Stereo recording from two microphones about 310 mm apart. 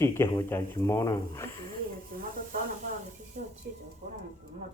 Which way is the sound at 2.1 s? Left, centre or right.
Right.